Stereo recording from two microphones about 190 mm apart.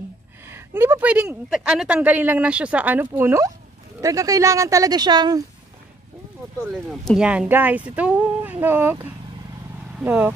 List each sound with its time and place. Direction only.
0.5 s a woman's voice: 10° right (ahead or behind)
6.9 s a woman's voice: 5° right (ahead or behind)
9.9 s speech: 10° right (ahead or behind)